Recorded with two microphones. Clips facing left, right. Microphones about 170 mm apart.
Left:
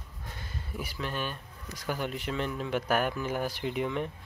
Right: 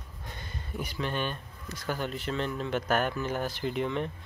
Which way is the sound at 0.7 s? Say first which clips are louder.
Right 3 dB; 5° left (ahead or behind).